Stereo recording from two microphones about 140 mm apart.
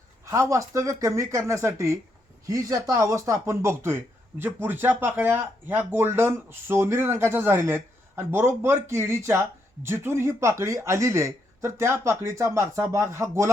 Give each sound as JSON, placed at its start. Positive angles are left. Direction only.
{"t": 0.3, "sound": "speech", "side_deg": -20}